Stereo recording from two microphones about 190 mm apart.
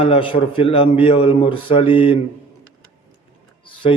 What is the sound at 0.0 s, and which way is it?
A man's voice, 30° left (ahead or behind).